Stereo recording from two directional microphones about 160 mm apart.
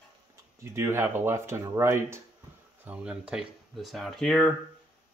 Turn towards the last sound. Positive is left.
turn(degrees=5)  # may be behind; listen again after turning